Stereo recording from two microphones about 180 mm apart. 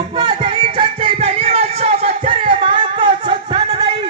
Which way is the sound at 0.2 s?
25° right (ahead or behind).